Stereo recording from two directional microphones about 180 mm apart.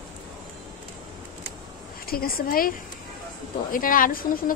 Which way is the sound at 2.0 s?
55° left (ahead or behind).